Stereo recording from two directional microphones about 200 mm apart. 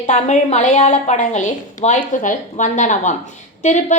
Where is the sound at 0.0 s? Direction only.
35° left (ahead or behind).